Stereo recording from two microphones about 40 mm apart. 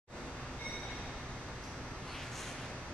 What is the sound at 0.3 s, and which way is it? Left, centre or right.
Train, left.